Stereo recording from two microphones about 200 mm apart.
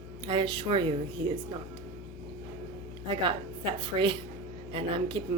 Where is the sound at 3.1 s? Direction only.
25° right (ahead or behind).